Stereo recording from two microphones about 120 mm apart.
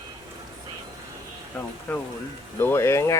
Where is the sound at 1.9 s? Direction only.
15° left (ahead or behind).